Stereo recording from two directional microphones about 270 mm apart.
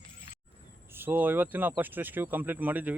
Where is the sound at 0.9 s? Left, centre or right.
Centre.